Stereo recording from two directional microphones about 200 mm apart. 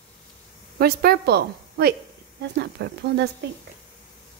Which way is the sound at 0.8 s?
50° right (ahead or behind).